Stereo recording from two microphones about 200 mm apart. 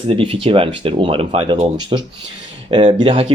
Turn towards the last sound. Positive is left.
turn(degrees=-25)  # may be behind; listen again after turning